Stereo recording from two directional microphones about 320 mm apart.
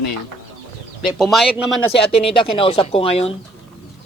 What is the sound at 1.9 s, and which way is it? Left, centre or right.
Speech, centre.